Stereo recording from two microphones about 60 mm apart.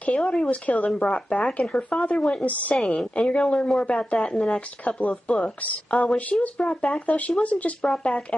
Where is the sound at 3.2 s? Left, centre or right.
Centre.